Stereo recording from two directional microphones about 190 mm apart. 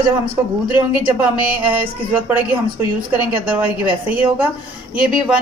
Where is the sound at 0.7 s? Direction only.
10° right (ahead or behind).